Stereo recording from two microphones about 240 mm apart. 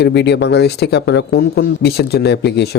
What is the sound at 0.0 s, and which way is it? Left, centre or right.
A man's voice, left.